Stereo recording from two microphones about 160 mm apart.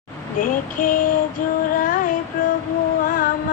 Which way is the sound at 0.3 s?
60° left (ahead or behind).